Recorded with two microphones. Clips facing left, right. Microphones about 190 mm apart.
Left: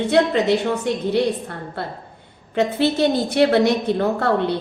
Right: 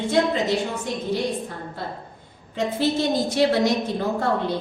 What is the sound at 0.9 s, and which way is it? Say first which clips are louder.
A woman's voice: left 7 dB; 65° left (ahead or behind).